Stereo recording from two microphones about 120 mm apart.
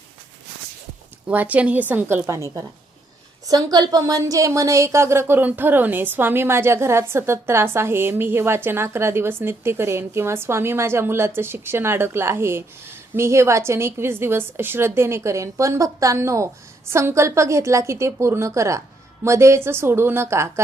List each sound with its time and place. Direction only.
1.3 s a woman's voice: 10° right (ahead or behind)